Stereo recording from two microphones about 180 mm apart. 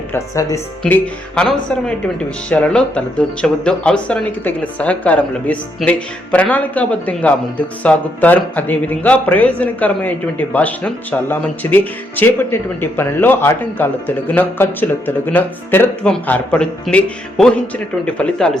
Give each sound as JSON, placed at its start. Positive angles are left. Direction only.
{"t": 0.1, "sound": "a man's voice", "side_deg": 15}
{"t": 0.8, "sound": "a man's voice", "side_deg": 5}